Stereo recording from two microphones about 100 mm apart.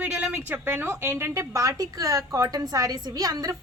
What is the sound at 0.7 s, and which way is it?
A woman's voice, 25° right (ahead or behind).